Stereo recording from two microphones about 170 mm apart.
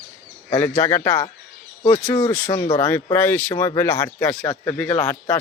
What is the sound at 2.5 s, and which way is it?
Speech, 25° left (ahead or behind).